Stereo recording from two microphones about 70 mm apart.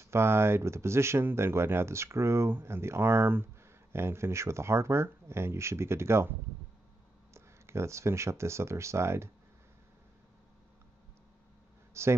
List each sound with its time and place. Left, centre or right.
0.0 s speech: right
7.3 s speech: right
11.9 s a man's voice: right